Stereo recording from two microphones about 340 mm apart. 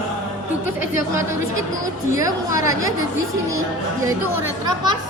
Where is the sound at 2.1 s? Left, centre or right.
Centre.